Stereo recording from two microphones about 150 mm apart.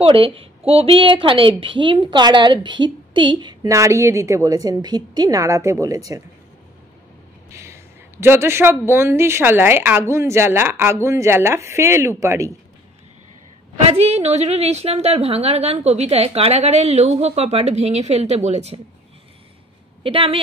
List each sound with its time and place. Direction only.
0.0 s a woman's voice: 40° right (ahead or behind); by 6.2 s 20° right (ahead or behind)
7.5 s a woman's voice: 20° right (ahead or behind)
13.8 s a woman's voice: 45° right (ahead or behind)
20.0 s speech: 35° right (ahead or behind)